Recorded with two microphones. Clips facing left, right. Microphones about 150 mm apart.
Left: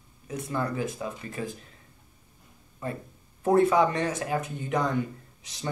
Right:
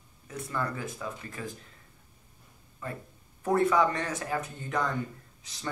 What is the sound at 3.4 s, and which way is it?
Speech, 20° left (ahead or behind).